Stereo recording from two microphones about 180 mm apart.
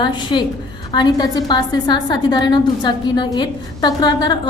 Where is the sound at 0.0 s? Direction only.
25° left (ahead or behind).